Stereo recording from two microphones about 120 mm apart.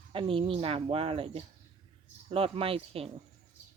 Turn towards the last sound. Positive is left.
turn(degrees=-55)  # may be behind; listen again after turning